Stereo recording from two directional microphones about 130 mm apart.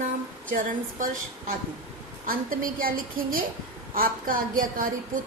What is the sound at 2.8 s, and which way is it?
A woman's voice, 90° right.